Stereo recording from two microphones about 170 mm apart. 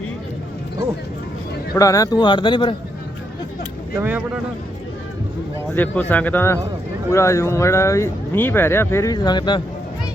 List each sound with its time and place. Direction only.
1.7 s speech: 20° left (ahead or behind)
3.9 s speech: 10° right (ahead or behind)
5.7 s speech: 10° left (ahead or behind); by 9.6 s 25° left (ahead or behind)